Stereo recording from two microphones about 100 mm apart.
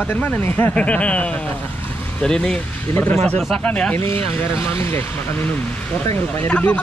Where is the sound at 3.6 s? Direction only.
10° left (ahead or behind).